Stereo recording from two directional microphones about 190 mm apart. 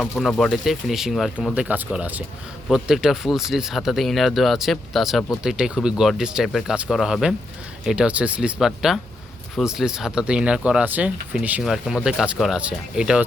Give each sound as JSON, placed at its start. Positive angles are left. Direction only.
{"t": 0.0, "sound": "speech", "side_deg": 0}